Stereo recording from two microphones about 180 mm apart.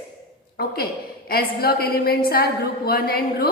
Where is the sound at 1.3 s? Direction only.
55° left (ahead or behind).